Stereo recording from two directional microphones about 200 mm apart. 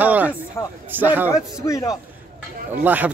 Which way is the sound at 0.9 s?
10° right (ahead or behind).